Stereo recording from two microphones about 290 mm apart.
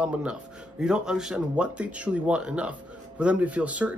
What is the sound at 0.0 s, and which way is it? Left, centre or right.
Speech, centre.